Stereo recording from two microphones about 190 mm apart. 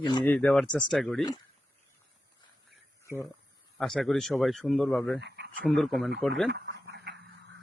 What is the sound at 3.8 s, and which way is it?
Speech, centre (ahead or behind).